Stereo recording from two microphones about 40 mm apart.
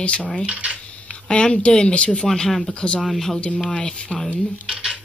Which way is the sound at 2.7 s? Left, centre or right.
Left.